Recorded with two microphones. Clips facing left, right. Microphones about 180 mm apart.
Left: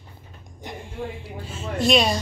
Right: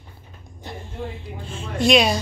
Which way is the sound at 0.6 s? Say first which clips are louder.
Even; 15° left (ahead or behind).